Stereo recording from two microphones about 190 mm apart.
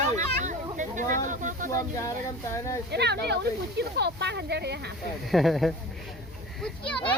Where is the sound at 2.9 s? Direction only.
60° right (ahead or behind).